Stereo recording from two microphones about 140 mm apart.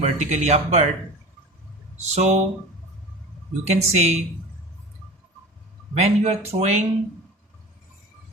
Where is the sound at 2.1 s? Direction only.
50° right (ahead or behind).